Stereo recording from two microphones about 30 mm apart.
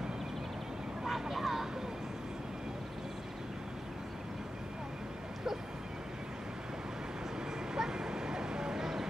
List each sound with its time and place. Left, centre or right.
1.3 s vehicle: centre
7.7 s bow-wow: right